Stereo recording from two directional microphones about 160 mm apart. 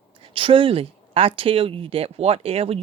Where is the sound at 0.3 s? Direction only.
35° right (ahead or behind).